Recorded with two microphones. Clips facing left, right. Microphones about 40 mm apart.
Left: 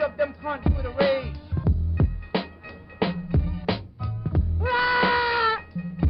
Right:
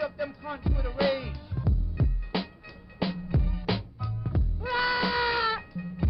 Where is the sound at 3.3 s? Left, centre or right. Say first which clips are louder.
Left 3 dB; centre.